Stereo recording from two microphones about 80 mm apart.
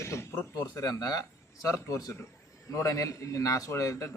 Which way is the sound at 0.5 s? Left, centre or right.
Left.